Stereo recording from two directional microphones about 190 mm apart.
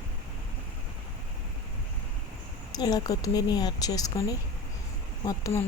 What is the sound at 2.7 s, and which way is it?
A woman's voice, 20° left (ahead or behind).